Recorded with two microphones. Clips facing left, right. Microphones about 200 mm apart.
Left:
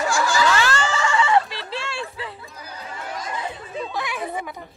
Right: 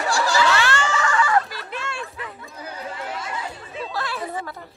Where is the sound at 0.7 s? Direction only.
35° left (ahead or behind).